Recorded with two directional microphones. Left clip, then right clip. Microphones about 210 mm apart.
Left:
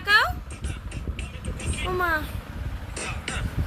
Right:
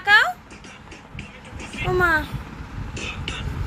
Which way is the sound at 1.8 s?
5° left (ahead or behind).